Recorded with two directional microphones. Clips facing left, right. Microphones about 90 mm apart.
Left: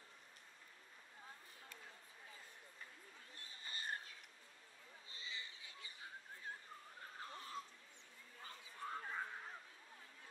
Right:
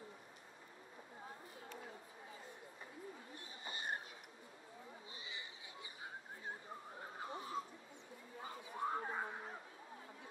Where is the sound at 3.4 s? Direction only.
20° right (ahead or behind).